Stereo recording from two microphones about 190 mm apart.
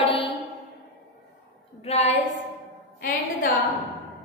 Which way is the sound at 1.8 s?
35° left (ahead or behind).